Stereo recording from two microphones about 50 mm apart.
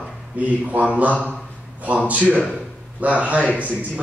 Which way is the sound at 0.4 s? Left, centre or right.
Right.